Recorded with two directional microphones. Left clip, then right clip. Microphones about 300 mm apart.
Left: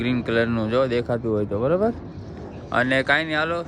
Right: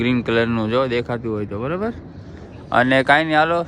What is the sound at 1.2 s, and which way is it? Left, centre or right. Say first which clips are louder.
Speech: left 2 dB; centre.